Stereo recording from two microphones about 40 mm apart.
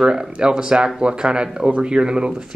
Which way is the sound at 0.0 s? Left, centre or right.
Centre.